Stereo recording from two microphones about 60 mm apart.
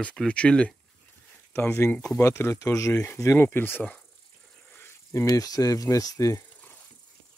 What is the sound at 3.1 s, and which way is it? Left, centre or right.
Speech, left.